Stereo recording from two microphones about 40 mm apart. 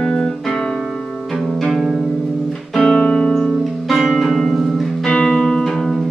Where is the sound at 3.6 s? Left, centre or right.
Centre.